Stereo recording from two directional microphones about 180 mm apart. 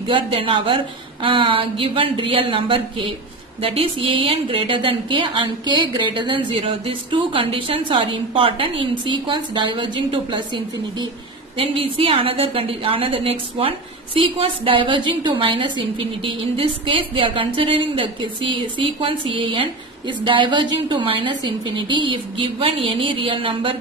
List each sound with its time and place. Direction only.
0.0 s a woman's voice: 30° right (ahead or behind)